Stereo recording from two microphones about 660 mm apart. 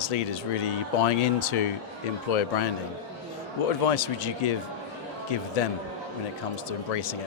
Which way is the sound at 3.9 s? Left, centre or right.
Left.